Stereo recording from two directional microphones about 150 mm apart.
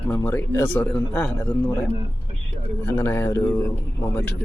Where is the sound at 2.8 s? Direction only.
15° left (ahead or behind).